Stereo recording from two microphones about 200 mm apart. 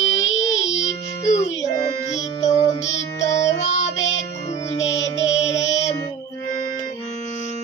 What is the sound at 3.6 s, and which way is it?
Music, 35° left (ahead or behind).